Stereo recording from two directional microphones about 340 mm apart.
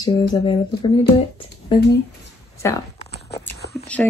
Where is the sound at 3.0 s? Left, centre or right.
Left.